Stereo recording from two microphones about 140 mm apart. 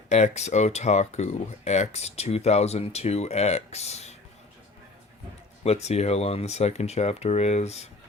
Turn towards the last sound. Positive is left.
turn(degrees=50)  # may be behind; listen again after turning